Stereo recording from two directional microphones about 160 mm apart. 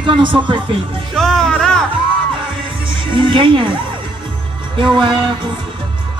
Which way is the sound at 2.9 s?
30° right (ahead or behind).